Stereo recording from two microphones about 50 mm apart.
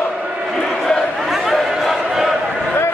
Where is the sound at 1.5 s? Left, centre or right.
Centre.